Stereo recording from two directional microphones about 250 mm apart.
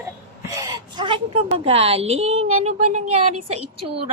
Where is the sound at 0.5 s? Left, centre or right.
Centre.